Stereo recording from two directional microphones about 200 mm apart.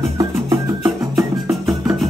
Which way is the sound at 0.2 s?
15° right (ahead or behind).